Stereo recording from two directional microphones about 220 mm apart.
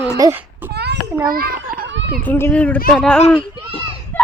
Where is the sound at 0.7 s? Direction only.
50° right (ahead or behind).